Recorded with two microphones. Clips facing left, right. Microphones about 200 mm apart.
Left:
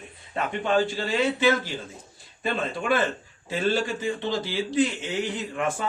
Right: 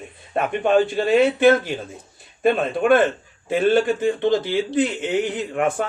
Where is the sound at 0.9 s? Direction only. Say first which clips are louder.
Right 8 dB; 55° right (ahead or behind).